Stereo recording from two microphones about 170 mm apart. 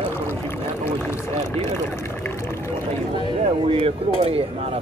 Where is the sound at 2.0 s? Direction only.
15° left (ahead or behind).